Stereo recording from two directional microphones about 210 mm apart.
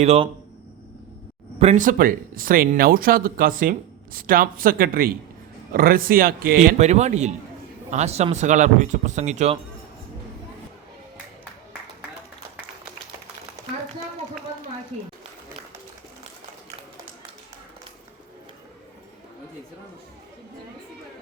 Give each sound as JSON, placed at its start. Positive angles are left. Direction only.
{"t": 0.0, "sound": "speech", "side_deg": -30}
{"t": 1.5, "sound": "speech", "side_deg": -35}
{"t": 6.6, "sound": "speech", "side_deg": -30}